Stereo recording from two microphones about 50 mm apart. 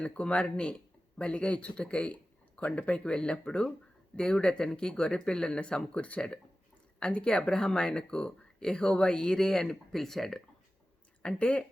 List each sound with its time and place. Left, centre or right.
0.0 s speech: left; by 10.4 s centre
11.2 s speech: left